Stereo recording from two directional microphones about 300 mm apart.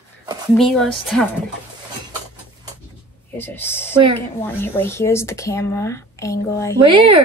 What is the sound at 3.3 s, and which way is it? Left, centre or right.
Speech, centre.